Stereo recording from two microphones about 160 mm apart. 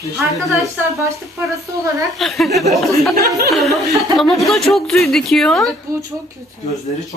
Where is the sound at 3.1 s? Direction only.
70° right (ahead or behind).